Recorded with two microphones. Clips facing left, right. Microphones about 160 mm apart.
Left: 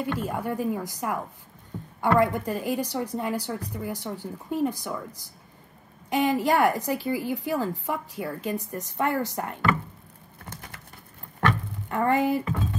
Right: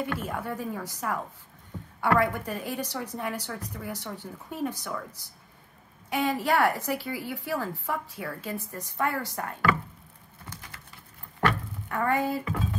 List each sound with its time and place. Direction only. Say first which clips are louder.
0.2 s a woman's voice: left 5 dB; 15° left (ahead or behind)
11.9 s a woman's voice: left 4 dB; 20° left (ahead or behind)